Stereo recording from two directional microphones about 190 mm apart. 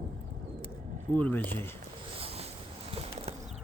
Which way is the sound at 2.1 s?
30° right (ahead or behind).